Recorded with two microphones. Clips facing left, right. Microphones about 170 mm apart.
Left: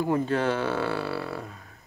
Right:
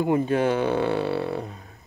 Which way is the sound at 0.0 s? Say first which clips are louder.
Right 3 dB; 15° right (ahead or behind).